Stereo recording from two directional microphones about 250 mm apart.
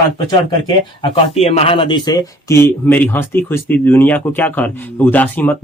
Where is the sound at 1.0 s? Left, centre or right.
Left.